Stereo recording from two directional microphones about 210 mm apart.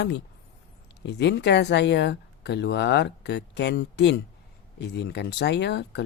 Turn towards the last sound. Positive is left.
turn(degrees=55)  # may be behind; listen again after turning